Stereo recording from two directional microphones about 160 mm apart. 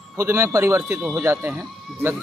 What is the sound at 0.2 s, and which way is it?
Speech, 15° right (ahead or behind).